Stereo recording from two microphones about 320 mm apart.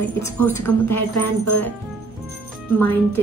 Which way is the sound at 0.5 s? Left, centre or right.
Left.